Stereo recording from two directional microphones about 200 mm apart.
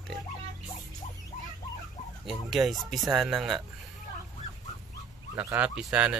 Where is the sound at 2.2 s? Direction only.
Centre (ahead or behind).